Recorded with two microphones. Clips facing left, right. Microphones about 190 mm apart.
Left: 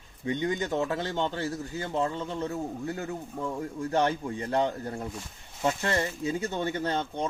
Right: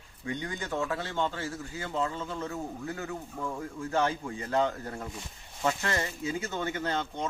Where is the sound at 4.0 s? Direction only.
35° left (ahead or behind).